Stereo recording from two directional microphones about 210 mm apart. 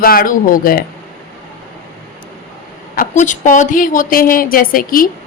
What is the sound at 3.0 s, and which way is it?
A woman's voice, 35° left (ahead or behind).